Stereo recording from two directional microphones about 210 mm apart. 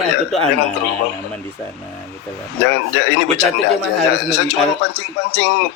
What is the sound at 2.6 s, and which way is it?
Speech, 55° left (ahead or behind).